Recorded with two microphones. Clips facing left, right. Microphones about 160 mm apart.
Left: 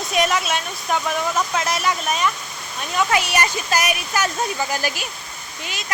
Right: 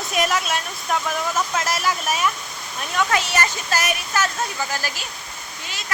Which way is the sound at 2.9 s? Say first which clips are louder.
Left 2 dB; 10° left (ahead or behind).